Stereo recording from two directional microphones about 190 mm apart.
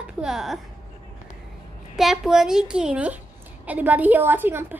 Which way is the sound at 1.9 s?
Centre (ahead or behind).